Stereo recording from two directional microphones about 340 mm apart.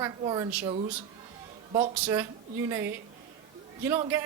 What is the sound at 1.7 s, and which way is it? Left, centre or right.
Speech, centre.